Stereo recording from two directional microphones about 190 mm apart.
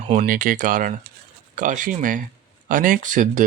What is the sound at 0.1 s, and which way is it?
Speech, 40° right (ahead or behind).